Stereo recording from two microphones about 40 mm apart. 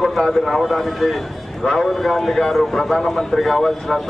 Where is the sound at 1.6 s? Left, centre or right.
Centre.